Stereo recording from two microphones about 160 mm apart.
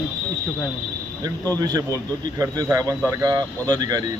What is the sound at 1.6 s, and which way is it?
A man's voice, 20° right (ahead or behind).